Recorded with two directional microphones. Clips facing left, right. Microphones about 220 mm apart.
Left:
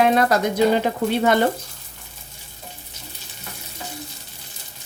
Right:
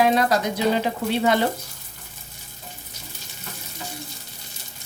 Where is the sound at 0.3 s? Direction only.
50° left (ahead or behind).